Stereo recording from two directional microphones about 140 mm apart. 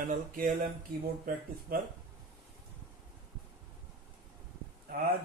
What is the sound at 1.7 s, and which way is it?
Speech, 90° right.